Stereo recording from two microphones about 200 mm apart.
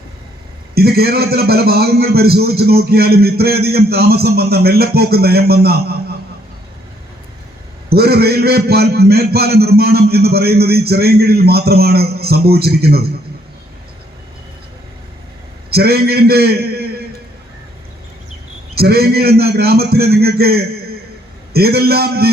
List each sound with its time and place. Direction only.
0.7 s a man's voice: 50° right (ahead or behind)
7.9 s a man's voice: 50° right (ahead or behind)
15.7 s a man's voice: 50° right (ahead or behind)
18.7 s a man's voice: 50° right (ahead or behind)